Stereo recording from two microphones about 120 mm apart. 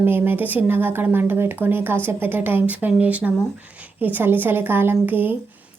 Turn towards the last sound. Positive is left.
turn(degrees=-15)  # may be behind; listen again after turning